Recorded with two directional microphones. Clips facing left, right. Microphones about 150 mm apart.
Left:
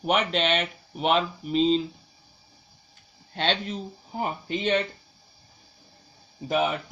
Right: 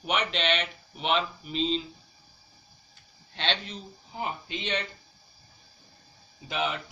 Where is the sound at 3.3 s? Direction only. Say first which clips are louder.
Left 5 dB; 45° left (ahead or behind).